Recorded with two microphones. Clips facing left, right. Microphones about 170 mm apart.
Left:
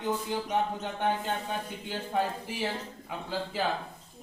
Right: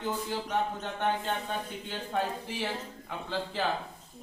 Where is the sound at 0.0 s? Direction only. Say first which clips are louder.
Left 2 dB; 15° left (ahead or behind).